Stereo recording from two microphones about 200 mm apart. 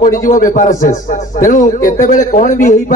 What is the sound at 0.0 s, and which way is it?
A man's voice, 40° left (ahead or behind).